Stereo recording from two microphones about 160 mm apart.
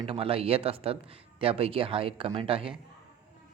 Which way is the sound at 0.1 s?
35° right (ahead or behind).